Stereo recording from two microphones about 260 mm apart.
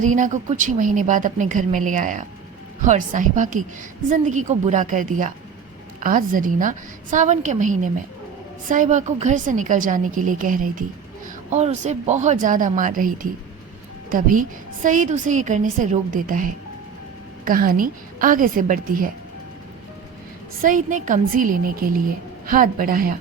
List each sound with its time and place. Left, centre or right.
0.0 s a woman's voice: right
20.6 s a woman's voice: right